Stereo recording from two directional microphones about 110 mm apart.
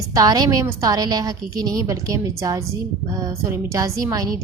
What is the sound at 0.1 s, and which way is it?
A woman's voice, 35° right (ahead or behind).